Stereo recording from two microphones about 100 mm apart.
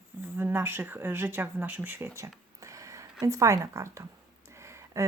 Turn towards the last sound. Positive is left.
turn(degrees=-30)  # may be behind; listen again after turning